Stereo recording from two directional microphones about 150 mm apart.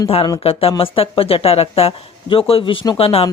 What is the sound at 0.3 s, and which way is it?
Speech, 40° left (ahead or behind).